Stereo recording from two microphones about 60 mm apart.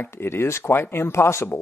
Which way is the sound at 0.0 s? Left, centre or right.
Left.